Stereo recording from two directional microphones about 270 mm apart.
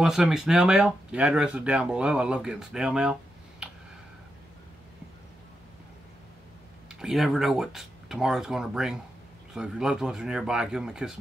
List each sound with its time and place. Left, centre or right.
0.0 s speech: centre
6.9 s speech: centre